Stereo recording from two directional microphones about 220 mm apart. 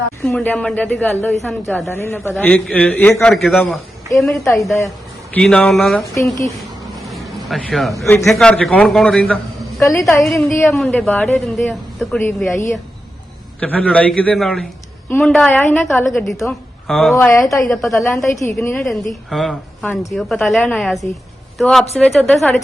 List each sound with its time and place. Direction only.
0.3 s a man's voice: 5° left (ahead or behind)
1.9 s a man's voice: 10° left (ahead or behind)
7.0 s vehicle: centre (ahead or behind)
8.0 s a man's voice: 10° left (ahead or behind)
9.8 s a man's voice: 15° left (ahead or behind)
10.2 s a man's voice: centre (ahead or behind)